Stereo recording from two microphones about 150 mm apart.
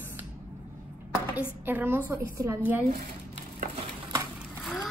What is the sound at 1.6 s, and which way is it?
Speech, 10° right (ahead or behind).